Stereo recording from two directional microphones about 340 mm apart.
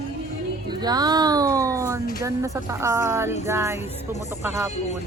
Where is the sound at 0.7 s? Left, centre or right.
Centre.